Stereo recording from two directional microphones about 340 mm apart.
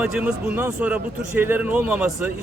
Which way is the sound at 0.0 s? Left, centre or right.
Centre.